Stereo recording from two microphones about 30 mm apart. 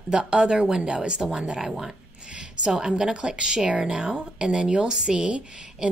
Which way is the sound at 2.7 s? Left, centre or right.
Right.